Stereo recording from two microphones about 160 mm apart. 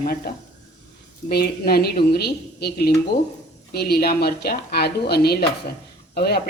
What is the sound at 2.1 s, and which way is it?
Speech, 90° left.